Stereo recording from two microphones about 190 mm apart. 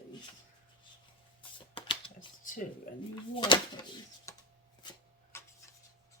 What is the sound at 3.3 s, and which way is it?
Speech, 25° left (ahead or behind).